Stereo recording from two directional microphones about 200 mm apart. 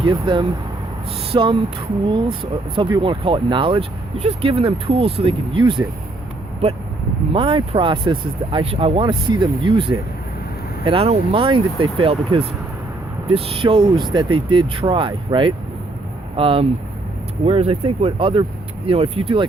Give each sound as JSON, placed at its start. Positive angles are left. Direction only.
{"t": 0.0, "sound": "speech", "side_deg": -25}
{"t": 7.3, "sound": "speech", "side_deg": -30}